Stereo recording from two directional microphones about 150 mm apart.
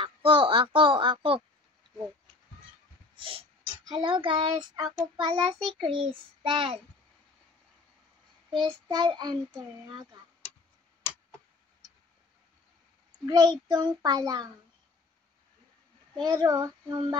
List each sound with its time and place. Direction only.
0.0 s a sound: 35° right (ahead or behind)
3.2 s snort: 35° right (ahead or behind)
3.9 s child singing: 30° right (ahead or behind)
8.6 s a child's voice: 30° right (ahead or behind)
13.2 s a child's voice: 25° right (ahead or behind)
16.3 s a child's voice: 25° right (ahead or behind)